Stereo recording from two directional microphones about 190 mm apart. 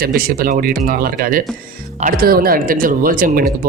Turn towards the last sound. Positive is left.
turn(degrees=-45)  # may be behind; listen again after turning